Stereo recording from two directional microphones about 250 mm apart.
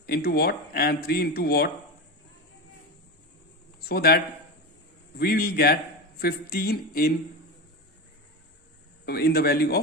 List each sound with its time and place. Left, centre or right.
0.0 s speech: left
3.8 s a man's voice: left
9.0 s speech: left